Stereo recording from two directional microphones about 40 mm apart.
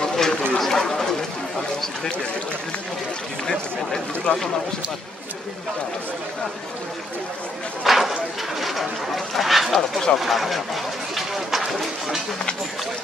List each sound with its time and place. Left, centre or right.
0.0 s a sound: centre
0.6 s speech: centre
3.4 s speech: centre
7.8 s speech: centre
9.8 s speech: centre
10.2 s speech: centre